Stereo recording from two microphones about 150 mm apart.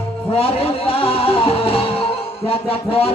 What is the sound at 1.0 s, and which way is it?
Music, 40° left (ahead or behind).